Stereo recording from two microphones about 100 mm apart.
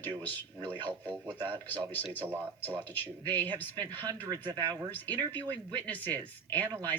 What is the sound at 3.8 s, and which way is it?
Speech, 40° right (ahead or behind).